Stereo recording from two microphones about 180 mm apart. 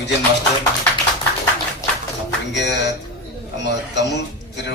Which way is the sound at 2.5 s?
70° left (ahead or behind).